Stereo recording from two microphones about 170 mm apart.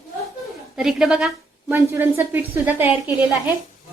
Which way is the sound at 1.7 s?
15° right (ahead or behind).